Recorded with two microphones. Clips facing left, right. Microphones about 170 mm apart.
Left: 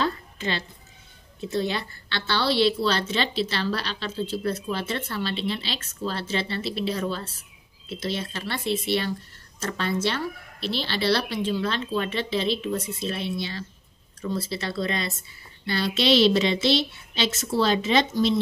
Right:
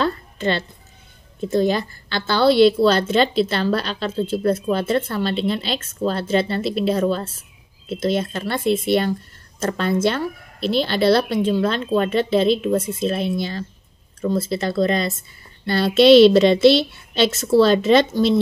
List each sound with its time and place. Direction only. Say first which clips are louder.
0.0 s a sound: right 6 dB; 60° right (ahead or behind)
1.4 s a woman's voice: right 8 dB; 45° right (ahead or behind)
15.6 s speech: right 10 dB; 55° right (ahead or behind)